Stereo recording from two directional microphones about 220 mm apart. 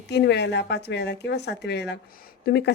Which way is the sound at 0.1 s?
50° left (ahead or behind).